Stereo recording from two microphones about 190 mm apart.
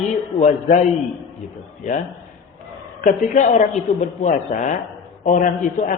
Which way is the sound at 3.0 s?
45° left (ahead or behind).